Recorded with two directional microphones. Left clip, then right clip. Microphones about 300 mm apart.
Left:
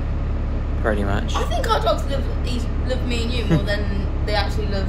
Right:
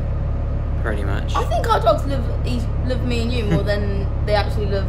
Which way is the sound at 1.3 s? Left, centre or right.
Right.